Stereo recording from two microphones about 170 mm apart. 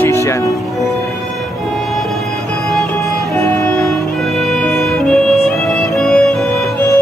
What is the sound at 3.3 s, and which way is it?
Music, 10° left (ahead or behind).